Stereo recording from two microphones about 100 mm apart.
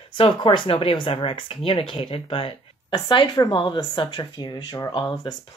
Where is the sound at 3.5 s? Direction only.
50° left (ahead or behind).